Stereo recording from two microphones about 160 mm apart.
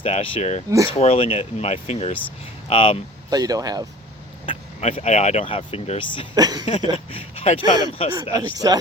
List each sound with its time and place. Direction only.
0.0 s speech: 35° left (ahead or behind)
3.2 s speech: 25° right (ahead or behind)
4.4 s speech: 35° left (ahead or behind)
6.3 s speech: 25° right (ahead or behind)
6.9 s speech: 35° left (ahead or behind)
8.1 s speech: 25° right (ahead or behind)